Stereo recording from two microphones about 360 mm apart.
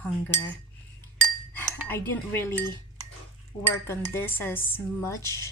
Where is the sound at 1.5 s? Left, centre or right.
Centre.